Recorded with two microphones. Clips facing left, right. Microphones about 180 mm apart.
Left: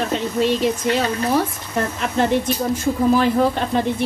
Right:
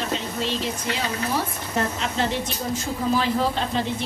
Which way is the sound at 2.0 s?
55° left (ahead or behind).